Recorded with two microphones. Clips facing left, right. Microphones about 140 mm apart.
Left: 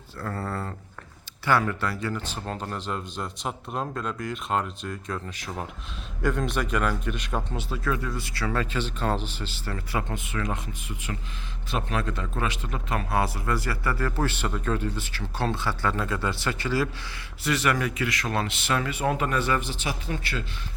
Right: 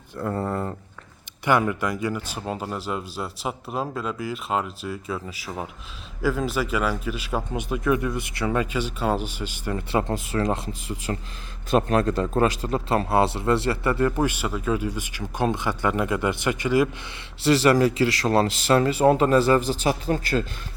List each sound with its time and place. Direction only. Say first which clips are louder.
0.2 s a sound: right 5 dB; 20° right (ahead or behind)
1.5 s a man's voice: right 3 dB; 15° right (ahead or behind)
9.9 s a man's voice: right 7 dB; 35° right (ahead or behind)
11.7 s a man's voice: right 9 dB; 45° right (ahead or behind); by 16.9 s 15° right (ahead or behind)
17.4 s a man's voice: right 8 dB; 30° right (ahead or behind)